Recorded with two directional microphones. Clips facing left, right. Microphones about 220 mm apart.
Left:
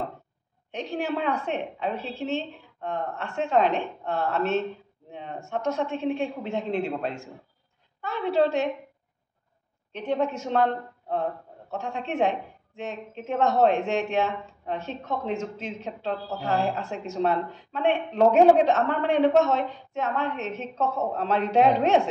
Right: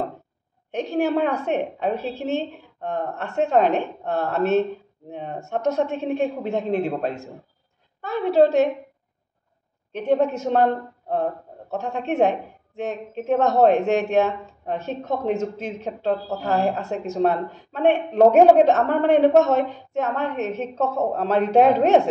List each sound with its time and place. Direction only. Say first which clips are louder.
0.7 s a woman's voice: right 7 dB; 45° right (ahead or behind)
9.9 s a woman's voice: right 6 dB; 45° right (ahead or behind)